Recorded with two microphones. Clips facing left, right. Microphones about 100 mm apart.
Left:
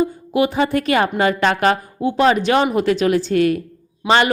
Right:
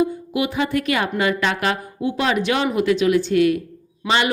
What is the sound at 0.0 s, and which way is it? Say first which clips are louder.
A woman's voice: left 3 dB; 35° left (ahead or behind).